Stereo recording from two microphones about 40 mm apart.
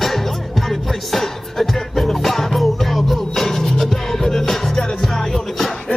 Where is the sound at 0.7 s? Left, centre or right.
Centre.